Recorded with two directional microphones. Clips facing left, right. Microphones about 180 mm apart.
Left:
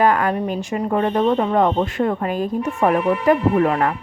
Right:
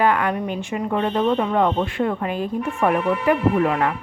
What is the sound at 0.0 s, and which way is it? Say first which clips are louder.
A woman's voice: left 2 dB; 40° left (ahead or behind).